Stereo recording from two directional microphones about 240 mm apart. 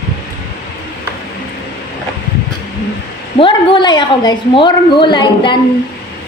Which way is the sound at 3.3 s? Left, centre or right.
Left.